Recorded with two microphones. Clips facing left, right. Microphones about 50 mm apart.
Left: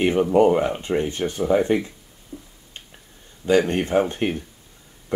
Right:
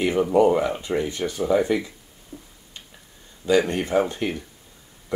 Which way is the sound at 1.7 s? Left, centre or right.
Left.